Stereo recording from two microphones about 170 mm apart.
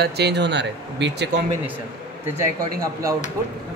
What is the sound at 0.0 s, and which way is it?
Speech, 75° right (ahead or behind).